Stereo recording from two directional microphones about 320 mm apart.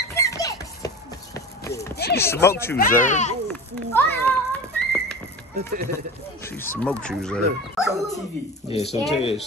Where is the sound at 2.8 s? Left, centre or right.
Left.